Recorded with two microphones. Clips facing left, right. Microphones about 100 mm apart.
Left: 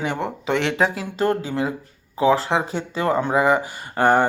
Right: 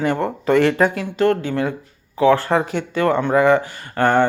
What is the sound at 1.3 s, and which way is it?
Speech, 15° left (ahead or behind).